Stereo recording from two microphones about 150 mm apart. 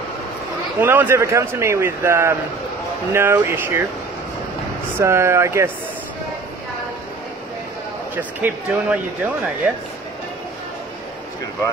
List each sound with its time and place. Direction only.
0.7 s speech: 15° right (ahead or behind)
4.9 s speech: 20° right (ahead or behind)
8.2 s speech: 10° right (ahead or behind)